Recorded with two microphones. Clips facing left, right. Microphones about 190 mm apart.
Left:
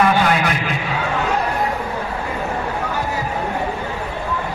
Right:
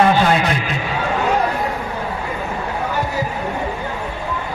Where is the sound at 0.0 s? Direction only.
30° right (ahead or behind).